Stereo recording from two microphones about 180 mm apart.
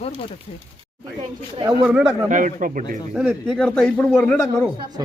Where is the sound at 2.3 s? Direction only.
45° right (ahead or behind).